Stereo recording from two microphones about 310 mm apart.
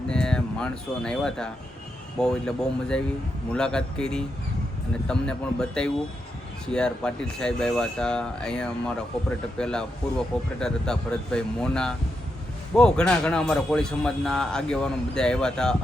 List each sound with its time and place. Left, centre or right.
0.1 s a man's voice: centre